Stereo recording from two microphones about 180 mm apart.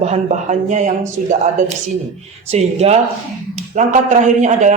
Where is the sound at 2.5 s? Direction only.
35° right (ahead or behind).